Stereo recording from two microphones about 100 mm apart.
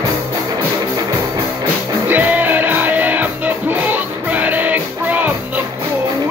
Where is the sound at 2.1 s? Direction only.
15° right (ahead or behind).